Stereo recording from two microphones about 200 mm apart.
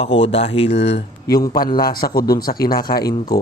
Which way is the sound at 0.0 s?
30° left (ahead or behind).